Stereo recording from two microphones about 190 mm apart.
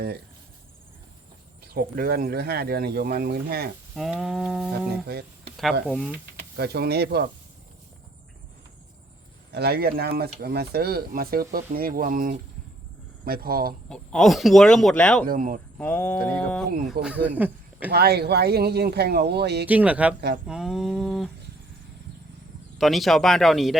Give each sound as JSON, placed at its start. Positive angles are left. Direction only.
{"t": 1.6, "sound": "speech", "side_deg": -55}
{"t": 3.9, "sound": "speech", "side_deg": 0}
{"t": 4.9, "sound": "speech", "side_deg": -60}
{"t": 5.9, "sound": "speech", "side_deg": 0}
{"t": 6.6, "sound": "speech", "side_deg": -55}
{"t": 9.5, "sound": "speech", "side_deg": -55}
{"t": 13.9, "sound": "speech", "side_deg": 5}
{"t": 15.3, "sound": "speech", "side_deg": -45}
{"t": 15.8, "sound": "a sound", "side_deg": 10}
{"t": 17.2, "sound": "speech", "side_deg": -10}
{"t": 17.9, "sound": "speech", "side_deg": -55}
{"t": 19.6, "sound": "speech", "side_deg": -5}
{"t": 20.5, "sound": "a sound", "side_deg": -5}
{"t": 22.8, "sound": "speech", "side_deg": 0}